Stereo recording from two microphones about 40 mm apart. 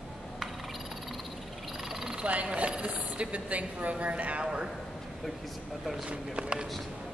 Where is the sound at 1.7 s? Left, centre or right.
Centre.